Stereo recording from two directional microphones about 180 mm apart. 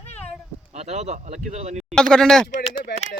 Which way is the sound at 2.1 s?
5° left (ahead or behind).